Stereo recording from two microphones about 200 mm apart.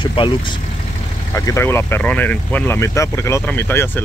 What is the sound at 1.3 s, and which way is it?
Speech, 15° left (ahead or behind).